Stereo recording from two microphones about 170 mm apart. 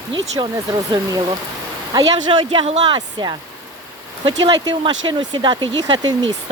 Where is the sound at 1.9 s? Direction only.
25° right (ahead or behind).